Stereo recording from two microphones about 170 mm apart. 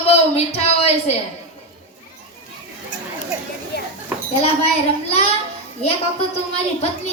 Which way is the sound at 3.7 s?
75° left (ahead or behind).